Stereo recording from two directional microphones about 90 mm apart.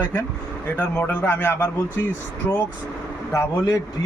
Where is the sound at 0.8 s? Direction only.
15° left (ahead or behind).